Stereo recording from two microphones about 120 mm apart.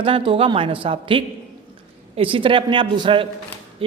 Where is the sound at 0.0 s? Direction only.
45° right (ahead or behind).